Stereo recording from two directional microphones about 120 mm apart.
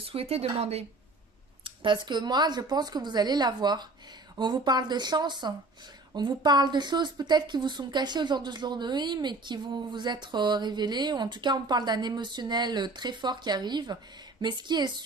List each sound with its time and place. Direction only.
0.0 s speech: 55° right (ahead or behind)
1.6 s speech: 40° right (ahead or behind)